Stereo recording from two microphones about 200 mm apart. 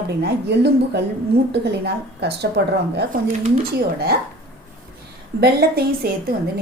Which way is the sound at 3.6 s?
50° right (ahead or behind).